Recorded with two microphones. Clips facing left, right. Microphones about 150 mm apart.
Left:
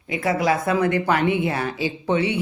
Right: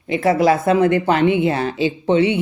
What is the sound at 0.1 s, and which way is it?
Speech, 30° right (ahead or behind).